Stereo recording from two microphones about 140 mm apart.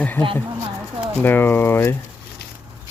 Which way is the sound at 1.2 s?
15° left (ahead or behind).